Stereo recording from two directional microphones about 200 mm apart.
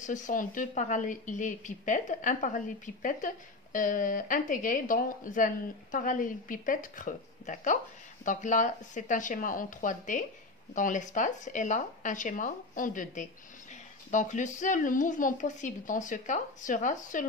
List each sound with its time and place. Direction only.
0.0 s a woman's voice: 40° left (ahead or behind)